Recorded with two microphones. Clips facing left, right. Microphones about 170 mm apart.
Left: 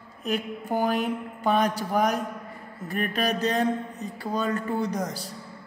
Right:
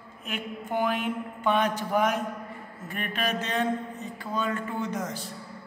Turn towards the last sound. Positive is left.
turn(degrees=40)  # may be behind; listen again after turning